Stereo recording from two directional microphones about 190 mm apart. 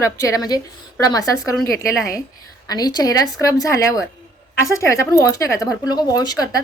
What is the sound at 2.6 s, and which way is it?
A woman's voice, 20° left (ahead or behind).